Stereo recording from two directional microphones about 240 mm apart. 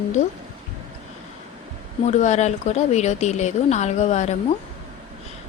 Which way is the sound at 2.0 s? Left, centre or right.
Left.